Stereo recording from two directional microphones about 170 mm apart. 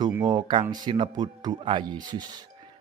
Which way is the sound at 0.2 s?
25° right (ahead or behind).